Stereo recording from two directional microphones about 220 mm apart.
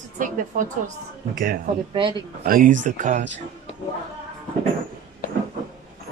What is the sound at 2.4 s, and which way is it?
Speech, 40° right (ahead or behind).